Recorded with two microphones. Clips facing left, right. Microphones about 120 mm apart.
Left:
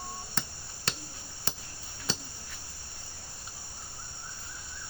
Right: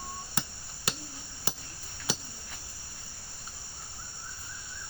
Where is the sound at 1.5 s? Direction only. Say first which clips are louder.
Right 1 dB; 10° right (ahead or behind).